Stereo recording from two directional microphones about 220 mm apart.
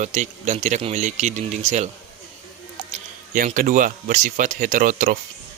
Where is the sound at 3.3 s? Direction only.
35° right (ahead or behind).